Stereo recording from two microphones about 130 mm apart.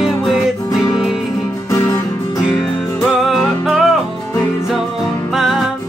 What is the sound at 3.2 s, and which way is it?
Music, centre (ahead or behind).